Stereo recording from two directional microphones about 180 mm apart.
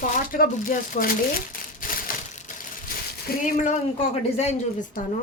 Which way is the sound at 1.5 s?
50° left (ahead or behind).